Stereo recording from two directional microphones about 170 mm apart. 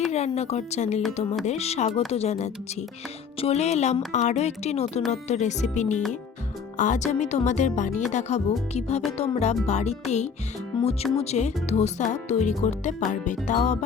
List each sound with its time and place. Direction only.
0.1 s a woman's voice: 40° left (ahead or behind)
1.9 s speech: centre (ahead or behind)
2.1 s a woman's voice: 40° left (ahead or behind)